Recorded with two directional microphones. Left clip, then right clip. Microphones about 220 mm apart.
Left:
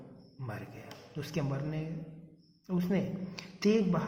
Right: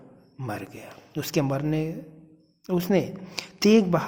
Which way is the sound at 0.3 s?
45° right (ahead or behind).